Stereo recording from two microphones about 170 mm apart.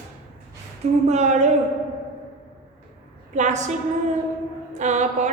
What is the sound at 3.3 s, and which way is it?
Speech, 45° right (ahead or behind).